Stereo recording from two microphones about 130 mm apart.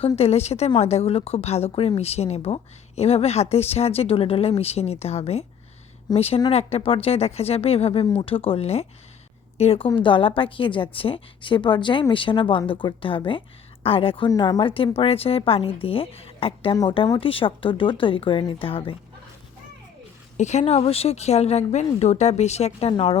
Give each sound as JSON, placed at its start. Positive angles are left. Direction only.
{"t": 0.2, "sound": "a woman's voice", "side_deg": 55}
{"t": 14.3, "sound": "speech", "side_deg": 30}
{"t": 20.3, "sound": "speech", "side_deg": 60}